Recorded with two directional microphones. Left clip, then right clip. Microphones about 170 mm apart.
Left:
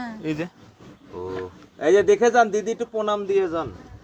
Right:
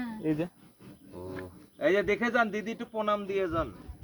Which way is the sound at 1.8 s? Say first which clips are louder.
Left 10 dB; 35° right (ahead or behind).